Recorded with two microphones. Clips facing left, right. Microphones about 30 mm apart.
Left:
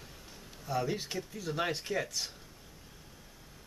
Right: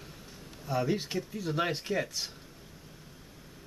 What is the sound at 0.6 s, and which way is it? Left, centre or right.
Speech, centre.